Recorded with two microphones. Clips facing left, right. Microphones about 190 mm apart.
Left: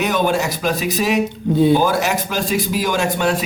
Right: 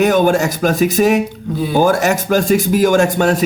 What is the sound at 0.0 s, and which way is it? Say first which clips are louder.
Speech: right 6 dB; 45° right (ahead or behind).